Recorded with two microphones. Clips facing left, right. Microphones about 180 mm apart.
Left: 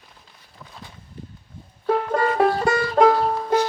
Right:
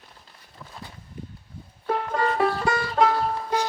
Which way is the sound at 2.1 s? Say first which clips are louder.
Left 3 dB; 45° left (ahead or behind).